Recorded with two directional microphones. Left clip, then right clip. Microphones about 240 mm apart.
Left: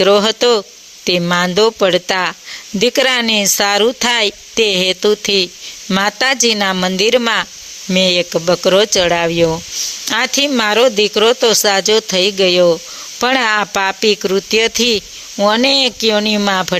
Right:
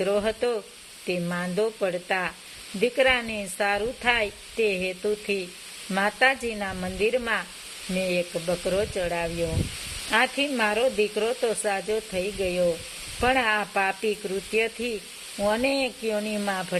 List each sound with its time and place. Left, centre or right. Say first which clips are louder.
0.0 s speech: left 14 dB; left